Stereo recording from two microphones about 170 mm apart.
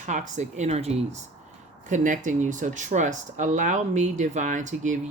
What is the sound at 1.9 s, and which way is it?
Speech, 50° right (ahead or behind).